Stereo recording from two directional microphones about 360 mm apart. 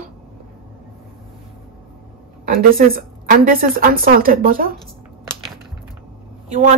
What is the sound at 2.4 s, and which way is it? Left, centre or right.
A woman's voice, right.